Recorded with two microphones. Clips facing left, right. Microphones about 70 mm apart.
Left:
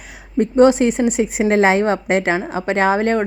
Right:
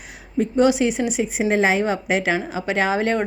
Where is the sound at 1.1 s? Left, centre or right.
Left.